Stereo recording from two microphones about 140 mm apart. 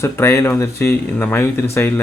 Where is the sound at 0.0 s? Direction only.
20° left (ahead or behind).